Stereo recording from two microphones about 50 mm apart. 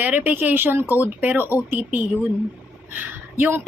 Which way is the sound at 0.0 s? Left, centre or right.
Right.